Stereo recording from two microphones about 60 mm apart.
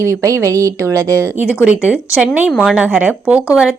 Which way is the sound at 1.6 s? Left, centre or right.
Right.